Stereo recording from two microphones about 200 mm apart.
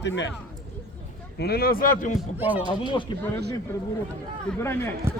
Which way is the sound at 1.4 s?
50° left (ahead or behind).